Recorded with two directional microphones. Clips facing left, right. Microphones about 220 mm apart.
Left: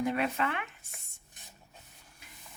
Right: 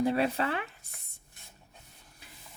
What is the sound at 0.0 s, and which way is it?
Speech, 35° right (ahead or behind).